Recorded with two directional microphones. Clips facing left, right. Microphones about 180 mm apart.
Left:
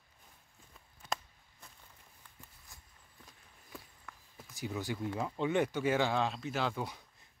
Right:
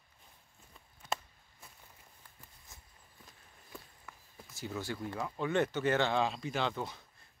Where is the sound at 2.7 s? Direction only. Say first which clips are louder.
Right 3 dB; 20° right (ahead or behind).